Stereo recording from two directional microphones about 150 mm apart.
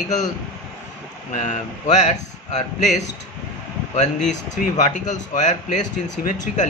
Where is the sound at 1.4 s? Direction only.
50° left (ahead or behind).